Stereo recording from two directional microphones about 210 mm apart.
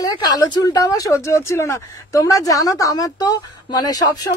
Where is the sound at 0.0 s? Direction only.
20° left (ahead or behind).